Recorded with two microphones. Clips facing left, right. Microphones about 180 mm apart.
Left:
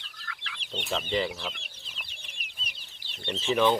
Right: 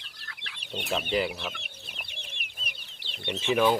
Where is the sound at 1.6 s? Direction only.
60° right (ahead or behind).